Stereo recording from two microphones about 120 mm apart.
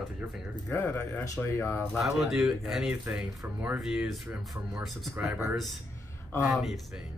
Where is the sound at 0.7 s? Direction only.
15° left (ahead or behind).